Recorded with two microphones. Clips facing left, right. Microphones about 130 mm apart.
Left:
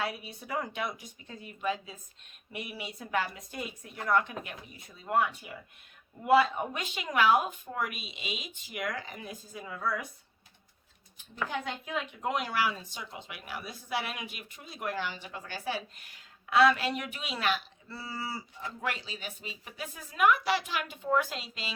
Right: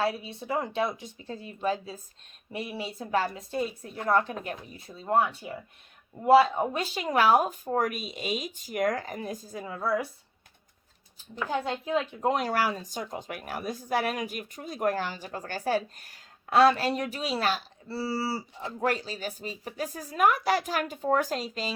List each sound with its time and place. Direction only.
0.0 s speech: 30° right (ahead or behind)
11.5 s speech: 30° right (ahead or behind)